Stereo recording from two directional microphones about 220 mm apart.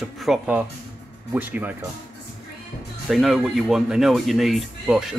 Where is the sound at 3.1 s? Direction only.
Centre (ahead or behind).